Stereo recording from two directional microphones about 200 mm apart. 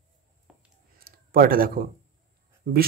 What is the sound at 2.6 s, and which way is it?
Speech, 45° right (ahead or behind).